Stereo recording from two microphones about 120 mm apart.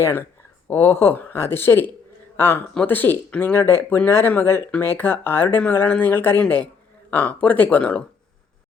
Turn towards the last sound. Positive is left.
turn(degrees=10)  # may be behind; listen again after turning